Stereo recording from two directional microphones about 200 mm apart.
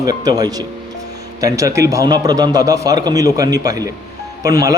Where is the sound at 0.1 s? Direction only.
20° right (ahead or behind).